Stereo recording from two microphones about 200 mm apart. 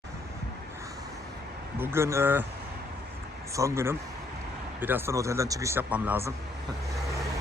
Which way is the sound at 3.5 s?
15° right (ahead or behind).